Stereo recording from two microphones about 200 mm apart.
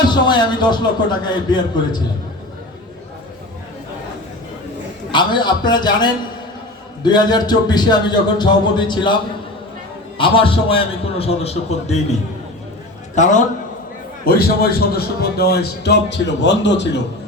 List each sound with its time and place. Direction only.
0.1 s speech: 20° left (ahead or behind)
5.1 s speech: 20° left (ahead or behind)
10.2 s speech: 25° left (ahead or behind)
13.1 s a man's voice: 40° left (ahead or behind)
14.3 s a man's voice: 50° left (ahead or behind)